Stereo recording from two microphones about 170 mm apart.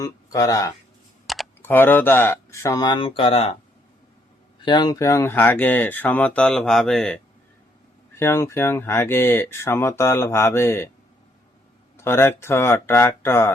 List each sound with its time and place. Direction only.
0.0 s speech: 20° left (ahead or behind)
1.3 s computer keyboard: centre (ahead or behind)
1.6 s speech: 10° left (ahead or behind); by 3.6 s 35° left (ahead or behind)
4.6 s speech: 25° left (ahead or behind); by 7.2 s 5° left (ahead or behind)
8.2 s speech: 15° left (ahead or behind)
11.9 s speech: 15° left (ahead or behind)